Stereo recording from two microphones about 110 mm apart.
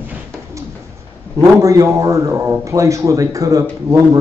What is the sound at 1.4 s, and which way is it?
A man's voice, 30° right (ahead or behind).